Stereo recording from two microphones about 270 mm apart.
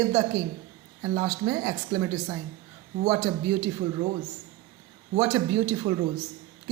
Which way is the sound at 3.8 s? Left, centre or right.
Centre.